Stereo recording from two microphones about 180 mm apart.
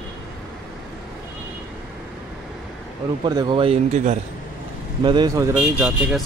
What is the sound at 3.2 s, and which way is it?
Speech, 25° right (ahead or behind).